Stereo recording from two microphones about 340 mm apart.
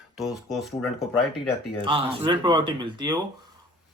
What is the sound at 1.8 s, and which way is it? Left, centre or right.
Speech, centre.